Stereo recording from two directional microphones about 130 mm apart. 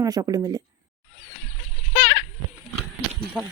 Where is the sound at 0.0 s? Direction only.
30° right (ahead or behind).